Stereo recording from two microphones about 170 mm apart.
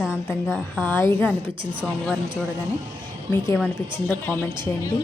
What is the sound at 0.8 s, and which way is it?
Speech, 15° left (ahead or behind).